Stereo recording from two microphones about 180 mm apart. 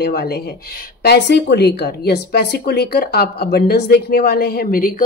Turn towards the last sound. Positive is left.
turn(degrees=50)  # may be behind; listen again after turning